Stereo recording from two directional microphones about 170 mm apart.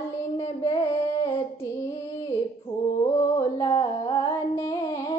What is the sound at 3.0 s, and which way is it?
Music, 20° left (ahead or behind).